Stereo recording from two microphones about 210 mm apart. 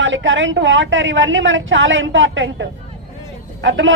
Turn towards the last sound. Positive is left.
turn(degrees=-60)  # may be behind; listen again after turning